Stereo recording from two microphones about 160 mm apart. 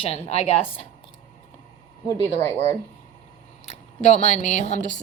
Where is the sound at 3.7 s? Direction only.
45° left (ahead or behind).